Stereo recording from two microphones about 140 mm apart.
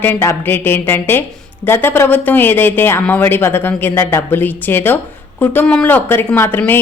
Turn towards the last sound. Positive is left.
turn(degrees=15)  # may be behind; listen again after turning